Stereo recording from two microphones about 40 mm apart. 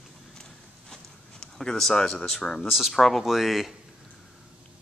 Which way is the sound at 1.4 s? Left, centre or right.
Centre.